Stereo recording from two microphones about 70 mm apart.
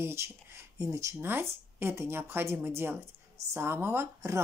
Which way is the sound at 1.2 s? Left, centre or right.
Right.